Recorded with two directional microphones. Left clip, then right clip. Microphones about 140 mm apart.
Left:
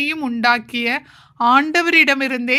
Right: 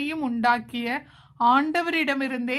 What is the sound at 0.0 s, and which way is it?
A woman's voice, 25° left (ahead or behind).